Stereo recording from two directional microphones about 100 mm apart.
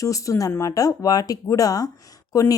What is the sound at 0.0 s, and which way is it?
Speech, 35° left (ahead or behind).